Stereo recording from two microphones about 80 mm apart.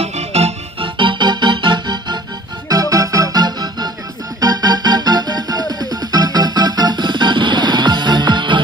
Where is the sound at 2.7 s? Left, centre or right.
Right.